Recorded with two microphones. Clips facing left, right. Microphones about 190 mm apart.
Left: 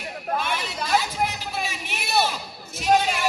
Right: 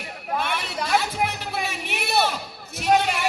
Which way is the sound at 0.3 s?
60° right (ahead or behind).